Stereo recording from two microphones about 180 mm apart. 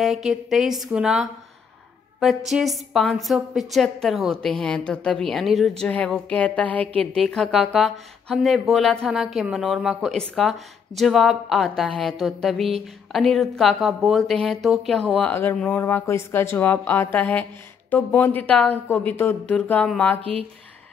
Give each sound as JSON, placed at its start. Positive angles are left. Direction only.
{"t": 0.0, "sound": "a woman's voice", "side_deg": 0}
{"t": 20.2, "sound": "speech", "side_deg": -30}